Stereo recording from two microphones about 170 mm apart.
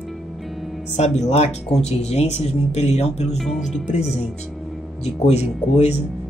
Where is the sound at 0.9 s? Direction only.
40° left (ahead or behind).